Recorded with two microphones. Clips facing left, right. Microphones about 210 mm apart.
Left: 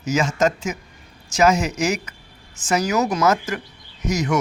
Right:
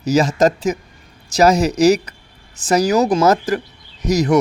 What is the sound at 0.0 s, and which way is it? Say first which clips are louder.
Speech: right 5 dB; 35° right (ahead or behind).